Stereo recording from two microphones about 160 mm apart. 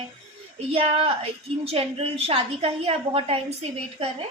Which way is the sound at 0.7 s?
35° right (ahead or behind).